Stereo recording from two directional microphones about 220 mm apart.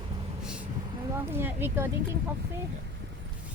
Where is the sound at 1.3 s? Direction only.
10° right (ahead or behind).